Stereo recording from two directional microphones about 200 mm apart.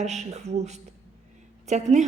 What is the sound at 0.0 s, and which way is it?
A woman's voice, 35° right (ahead or behind).